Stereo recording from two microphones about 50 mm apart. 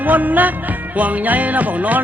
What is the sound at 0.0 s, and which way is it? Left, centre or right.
Music, right.